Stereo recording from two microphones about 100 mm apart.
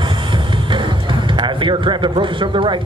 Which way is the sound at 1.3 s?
55° right (ahead or behind).